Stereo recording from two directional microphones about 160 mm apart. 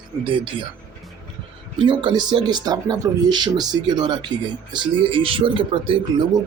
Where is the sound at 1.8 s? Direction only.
30° right (ahead or behind).